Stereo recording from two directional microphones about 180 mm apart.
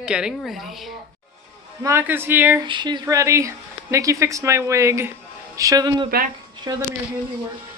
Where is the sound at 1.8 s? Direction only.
15° right (ahead or behind).